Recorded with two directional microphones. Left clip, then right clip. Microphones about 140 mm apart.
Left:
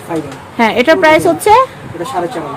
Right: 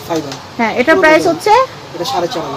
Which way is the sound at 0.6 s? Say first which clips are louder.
Left 1 dB; 55° left (ahead or behind).